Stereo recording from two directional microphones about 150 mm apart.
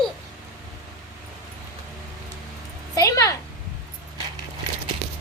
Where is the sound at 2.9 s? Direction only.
20° left (ahead or behind).